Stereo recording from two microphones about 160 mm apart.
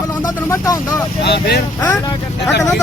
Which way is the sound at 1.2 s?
90° left.